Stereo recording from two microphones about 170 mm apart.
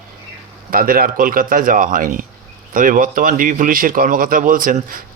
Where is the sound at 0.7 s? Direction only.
60° right (ahead or behind).